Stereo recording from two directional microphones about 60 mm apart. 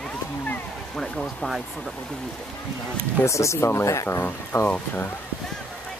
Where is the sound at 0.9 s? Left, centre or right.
Centre.